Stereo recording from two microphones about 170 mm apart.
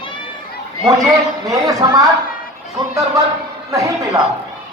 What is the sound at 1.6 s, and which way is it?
Speech, 20° right (ahead or behind).